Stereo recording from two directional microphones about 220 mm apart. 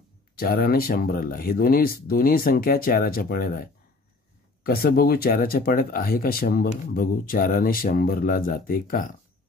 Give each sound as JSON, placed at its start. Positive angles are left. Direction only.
{"t": 0.4, "sound": "speech", "side_deg": 45}
{"t": 4.6, "sound": "speech", "side_deg": 45}